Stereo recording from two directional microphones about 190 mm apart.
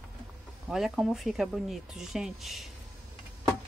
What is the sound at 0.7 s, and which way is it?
Speech, centre (ahead or behind).